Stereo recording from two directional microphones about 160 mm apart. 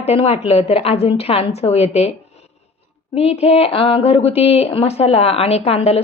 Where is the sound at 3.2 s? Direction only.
40° left (ahead or behind).